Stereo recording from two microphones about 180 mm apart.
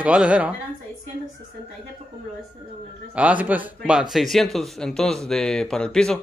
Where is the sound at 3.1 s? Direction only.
10° right (ahead or behind).